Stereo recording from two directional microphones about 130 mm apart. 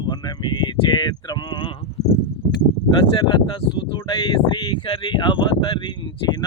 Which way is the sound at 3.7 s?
40° left (ahead or behind).